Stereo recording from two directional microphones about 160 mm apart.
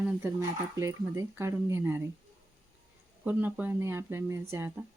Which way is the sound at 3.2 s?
10° right (ahead or behind).